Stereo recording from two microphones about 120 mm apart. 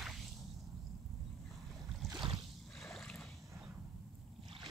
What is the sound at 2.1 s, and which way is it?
Boat, 40° right (ahead or behind).